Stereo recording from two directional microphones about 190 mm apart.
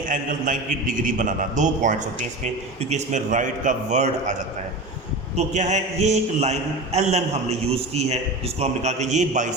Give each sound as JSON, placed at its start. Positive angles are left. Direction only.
{"t": 0.1, "sound": "a man's voice", "side_deg": -45}